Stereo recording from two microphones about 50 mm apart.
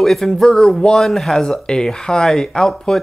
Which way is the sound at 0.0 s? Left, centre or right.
Centre.